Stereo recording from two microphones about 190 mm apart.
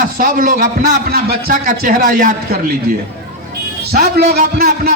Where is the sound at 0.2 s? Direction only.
45° right (ahead or behind).